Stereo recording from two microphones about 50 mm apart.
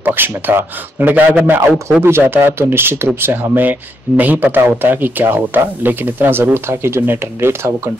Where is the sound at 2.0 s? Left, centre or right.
Right.